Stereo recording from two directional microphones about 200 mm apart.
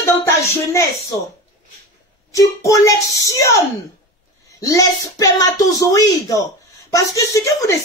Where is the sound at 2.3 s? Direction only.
15° left (ahead or behind).